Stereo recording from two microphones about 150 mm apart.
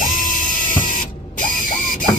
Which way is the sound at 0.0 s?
65° left (ahead or behind).